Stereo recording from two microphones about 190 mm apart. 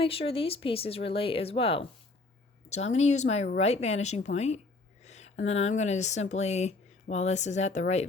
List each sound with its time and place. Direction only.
0.0 s speech: 30° left (ahead or behind)
5.0 s a sound: 35° left (ahead or behind)
5.5 s speech: 35° left (ahead or behind)